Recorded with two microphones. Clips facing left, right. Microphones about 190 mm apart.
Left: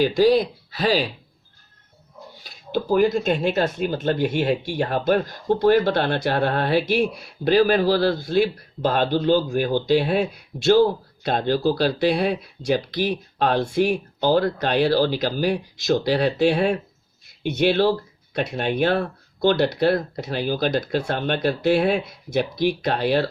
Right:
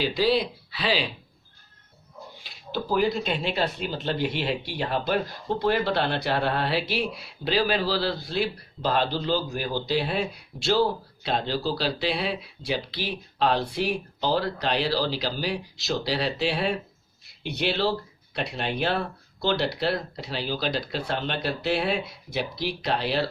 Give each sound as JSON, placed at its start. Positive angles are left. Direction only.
{"t": 0.0, "sound": "speech", "side_deg": 45}
{"t": 2.4, "sound": "speech", "side_deg": 50}